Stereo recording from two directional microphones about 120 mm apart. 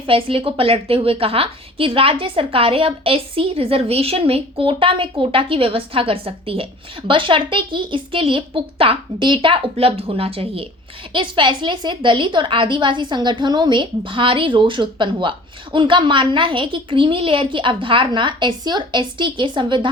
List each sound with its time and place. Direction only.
0.1 s a woman's voice: 50° right (ahead or behind)